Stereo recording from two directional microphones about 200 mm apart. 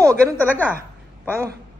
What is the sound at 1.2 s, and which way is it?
Speech, 10° right (ahead or behind).